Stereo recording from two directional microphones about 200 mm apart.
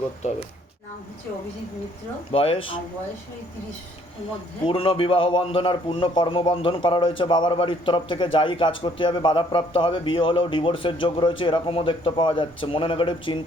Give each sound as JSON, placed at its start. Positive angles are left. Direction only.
{"t": 0.2, "sound": "speech", "side_deg": 35}
{"t": 2.3, "sound": "a man's voice", "side_deg": 30}
{"t": 4.6, "sound": "a man's voice", "side_deg": 25}